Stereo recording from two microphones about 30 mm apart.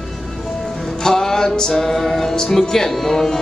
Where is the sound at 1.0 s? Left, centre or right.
Centre.